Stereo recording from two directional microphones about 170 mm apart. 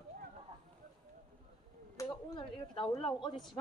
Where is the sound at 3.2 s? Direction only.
25° left (ahead or behind).